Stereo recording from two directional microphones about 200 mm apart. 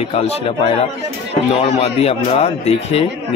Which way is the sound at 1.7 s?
30° left (ahead or behind).